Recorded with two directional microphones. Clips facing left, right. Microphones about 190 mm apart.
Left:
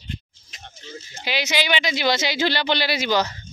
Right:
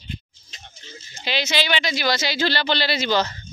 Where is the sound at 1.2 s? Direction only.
15° left (ahead or behind).